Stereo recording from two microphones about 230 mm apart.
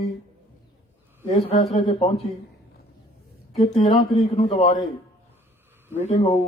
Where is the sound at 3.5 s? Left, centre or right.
Left.